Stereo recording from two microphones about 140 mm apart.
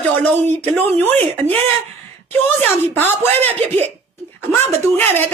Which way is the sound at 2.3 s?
15° left (ahead or behind).